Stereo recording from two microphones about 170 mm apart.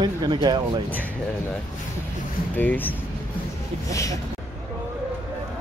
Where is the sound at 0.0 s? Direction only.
25° right (ahead or behind).